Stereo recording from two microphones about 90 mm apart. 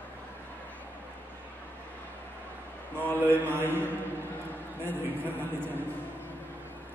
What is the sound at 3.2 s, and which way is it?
Mantra, 20° right (ahead or behind).